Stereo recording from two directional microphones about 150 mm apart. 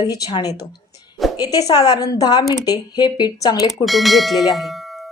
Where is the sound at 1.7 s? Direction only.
25° left (ahead or behind).